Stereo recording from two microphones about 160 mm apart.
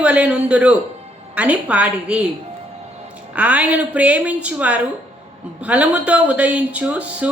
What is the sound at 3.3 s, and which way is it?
Speech, 10° right (ahead or behind).